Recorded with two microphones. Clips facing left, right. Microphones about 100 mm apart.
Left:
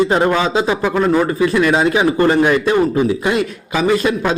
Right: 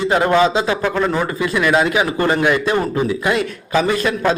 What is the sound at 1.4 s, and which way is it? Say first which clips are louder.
Speech: right 1 dB; 35° left (ahead or behind).